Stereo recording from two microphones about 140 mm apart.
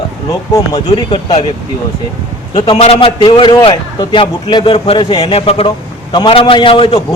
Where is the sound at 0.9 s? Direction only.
35° left (ahead or behind).